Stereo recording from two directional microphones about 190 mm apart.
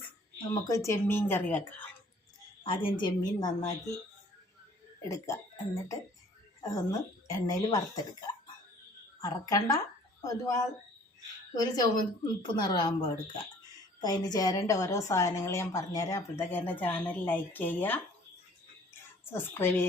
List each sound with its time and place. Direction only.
0.5 s a woman's voice: 15° left (ahead or behind)
2.6 s speech: 25° left (ahead or behind)
5.0 s a woman's voice: 15° left (ahead or behind)
9.2 s a woman's voice: 20° left (ahead or behind)
19.3 s a woman's voice: 10° left (ahead or behind)